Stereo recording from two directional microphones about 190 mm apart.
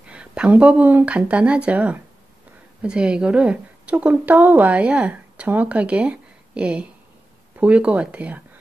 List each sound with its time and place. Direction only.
0.1 s a woman's voice: 5° right (ahead or behind)